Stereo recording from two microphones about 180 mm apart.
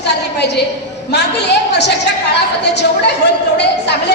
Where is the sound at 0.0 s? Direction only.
70° left (ahead or behind).